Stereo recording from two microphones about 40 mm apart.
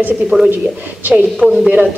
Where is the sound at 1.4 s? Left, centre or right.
Centre.